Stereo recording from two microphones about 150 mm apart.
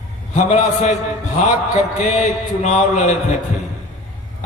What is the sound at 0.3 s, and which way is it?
A man's voice, 50° left (ahead or behind).